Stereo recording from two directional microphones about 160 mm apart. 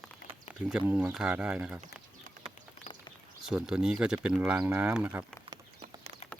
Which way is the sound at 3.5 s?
5° right (ahead or behind).